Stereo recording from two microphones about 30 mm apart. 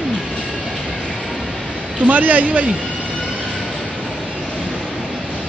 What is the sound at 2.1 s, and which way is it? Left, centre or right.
Speech, right.